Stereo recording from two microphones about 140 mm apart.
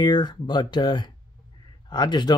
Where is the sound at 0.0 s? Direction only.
30° left (ahead or behind).